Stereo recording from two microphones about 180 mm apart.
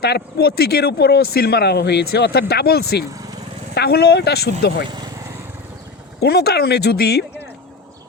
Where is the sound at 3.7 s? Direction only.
60° left (ahead or behind).